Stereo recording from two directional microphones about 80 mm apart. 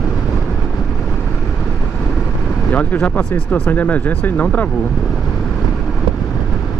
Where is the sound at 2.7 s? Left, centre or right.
Left.